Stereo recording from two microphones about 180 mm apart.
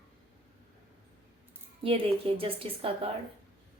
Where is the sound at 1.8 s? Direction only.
30° right (ahead or behind).